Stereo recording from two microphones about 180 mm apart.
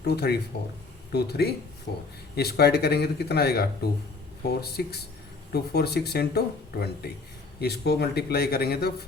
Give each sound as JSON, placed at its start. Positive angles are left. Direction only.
{"t": 0.1, "sound": "speech", "side_deg": 65}